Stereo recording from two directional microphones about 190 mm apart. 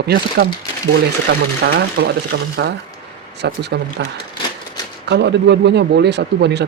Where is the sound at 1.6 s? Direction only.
60° right (ahead or behind).